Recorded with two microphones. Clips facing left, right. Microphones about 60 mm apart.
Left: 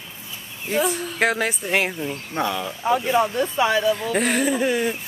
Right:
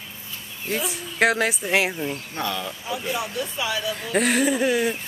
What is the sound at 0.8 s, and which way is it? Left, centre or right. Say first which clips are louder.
Speech: left 10 dB; left.